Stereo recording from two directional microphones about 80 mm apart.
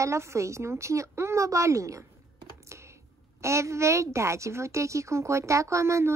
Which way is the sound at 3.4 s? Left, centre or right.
Right.